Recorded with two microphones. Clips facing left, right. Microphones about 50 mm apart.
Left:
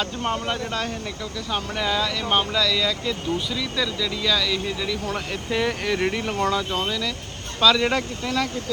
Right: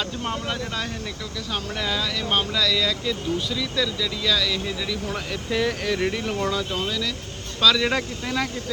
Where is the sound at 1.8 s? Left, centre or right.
Centre.